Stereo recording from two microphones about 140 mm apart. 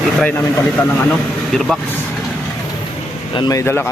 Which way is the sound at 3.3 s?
35° left (ahead or behind).